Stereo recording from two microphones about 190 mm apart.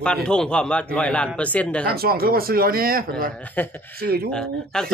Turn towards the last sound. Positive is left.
turn(degrees=5)  # may be behind; listen again after turning